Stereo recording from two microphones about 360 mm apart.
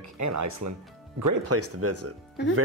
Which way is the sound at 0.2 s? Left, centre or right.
Right.